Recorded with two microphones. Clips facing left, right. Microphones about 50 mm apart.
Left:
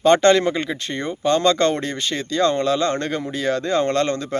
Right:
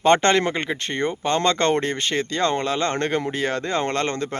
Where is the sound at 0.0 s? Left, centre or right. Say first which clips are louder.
Left 3 dB; right.